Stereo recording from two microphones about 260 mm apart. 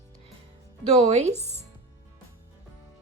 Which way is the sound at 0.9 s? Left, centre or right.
Right.